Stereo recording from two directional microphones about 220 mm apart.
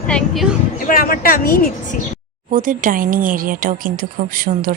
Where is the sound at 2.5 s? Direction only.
35° right (ahead or behind).